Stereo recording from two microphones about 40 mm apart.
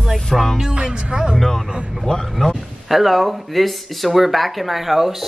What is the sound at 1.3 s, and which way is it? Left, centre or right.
Speech, centre.